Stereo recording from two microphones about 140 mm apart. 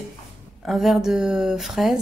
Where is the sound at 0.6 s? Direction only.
Centre (ahead or behind).